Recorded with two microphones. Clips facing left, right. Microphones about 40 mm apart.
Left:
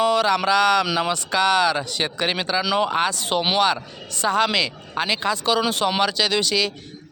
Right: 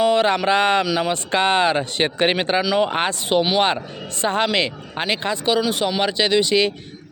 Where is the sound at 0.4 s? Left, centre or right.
Right.